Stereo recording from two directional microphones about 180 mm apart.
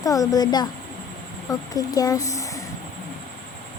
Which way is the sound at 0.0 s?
20° left (ahead or behind).